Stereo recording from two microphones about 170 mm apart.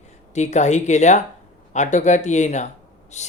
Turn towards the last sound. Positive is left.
turn(degrees=40)  # may be behind; listen again after turning